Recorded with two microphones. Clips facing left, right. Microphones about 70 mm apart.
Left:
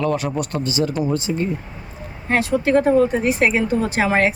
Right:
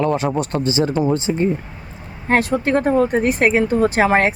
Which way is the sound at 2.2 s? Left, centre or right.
Right.